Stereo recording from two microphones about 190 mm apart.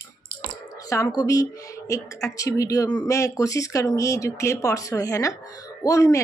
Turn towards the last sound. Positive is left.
turn(degrees=15)  # may be behind; listen again after turning